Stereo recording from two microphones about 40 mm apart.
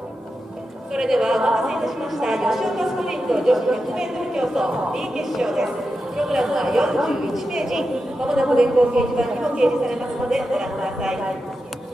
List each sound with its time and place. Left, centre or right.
0.9 s a woman's voice: centre